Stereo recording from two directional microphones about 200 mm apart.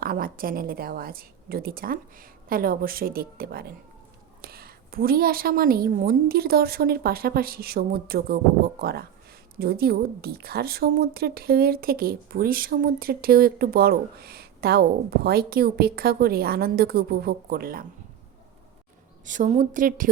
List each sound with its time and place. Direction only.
0.0 s a woman's voice: 45° right (ahead or behind)
19.2 s a woman's voice: 40° right (ahead or behind)